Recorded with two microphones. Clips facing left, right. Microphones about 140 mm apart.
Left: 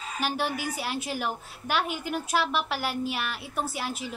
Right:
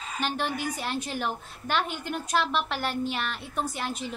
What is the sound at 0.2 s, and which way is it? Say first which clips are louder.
A woman's voice: even; 5° left (ahead or behind).